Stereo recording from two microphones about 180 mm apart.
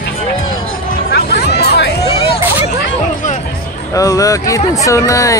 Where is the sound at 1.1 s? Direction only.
65° left (ahead or behind).